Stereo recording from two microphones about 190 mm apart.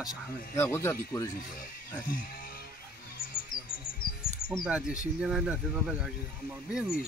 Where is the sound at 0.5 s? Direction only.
15° left (ahead or behind).